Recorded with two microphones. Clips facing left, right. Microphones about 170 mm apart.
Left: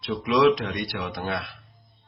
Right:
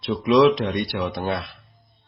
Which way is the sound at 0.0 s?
25° right (ahead or behind).